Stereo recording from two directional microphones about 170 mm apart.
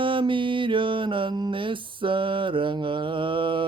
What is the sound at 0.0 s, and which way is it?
Mantra, 30° right (ahead or behind).